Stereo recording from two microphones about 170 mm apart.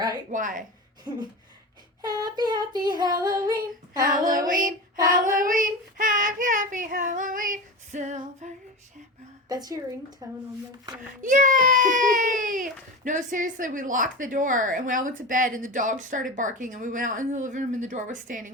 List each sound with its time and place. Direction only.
0.3 s a woman's voice: 50° right (ahead or behind)
1.1 s child singing: 25° right (ahead or behind)
4.3 s a woman's voice: 55° right (ahead or behind)
5.4 s child singing: 50° right (ahead or behind)
9.5 s child singing: 20° right (ahead or behind)
11.2 s a woman's voice: 50° right (ahead or behind)